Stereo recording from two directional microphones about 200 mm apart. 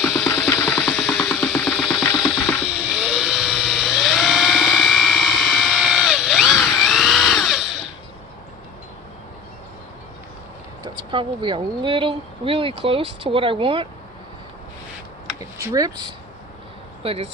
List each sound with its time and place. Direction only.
0.0 s a sound: centre (ahead or behind)
0.8 s music: centre (ahead or behind)
2.7 s helicopter: 5° right (ahead or behind)
11.1 s speech: 25° right (ahead or behind)
15.4 s speech: 15° right (ahead or behind)
17.0 s speech: 30° right (ahead or behind)